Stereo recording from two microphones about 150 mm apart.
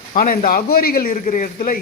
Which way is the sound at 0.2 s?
70° left (ahead or behind).